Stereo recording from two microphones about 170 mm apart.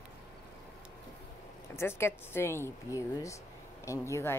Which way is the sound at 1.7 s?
15° left (ahead or behind).